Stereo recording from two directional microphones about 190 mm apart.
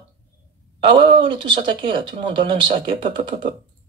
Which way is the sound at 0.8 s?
25° right (ahead or behind).